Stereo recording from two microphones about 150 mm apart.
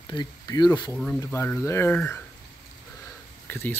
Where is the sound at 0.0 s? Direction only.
30° left (ahead or behind).